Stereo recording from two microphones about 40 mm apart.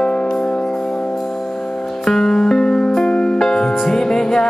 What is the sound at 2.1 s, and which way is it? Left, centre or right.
Music, centre.